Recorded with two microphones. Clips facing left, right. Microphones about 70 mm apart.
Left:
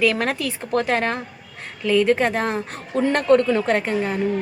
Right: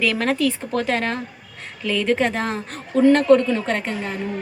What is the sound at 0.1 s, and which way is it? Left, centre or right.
Speech, centre.